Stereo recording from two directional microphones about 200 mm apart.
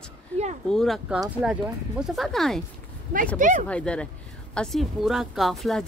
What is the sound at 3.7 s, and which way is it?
Speech, 5° left (ahead or behind).